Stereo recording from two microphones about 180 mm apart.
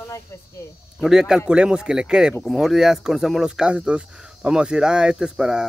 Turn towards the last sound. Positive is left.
turn(degrees=-5)  # may be behind; listen again after turning